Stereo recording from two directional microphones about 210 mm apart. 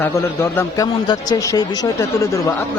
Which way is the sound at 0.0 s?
10° left (ahead or behind).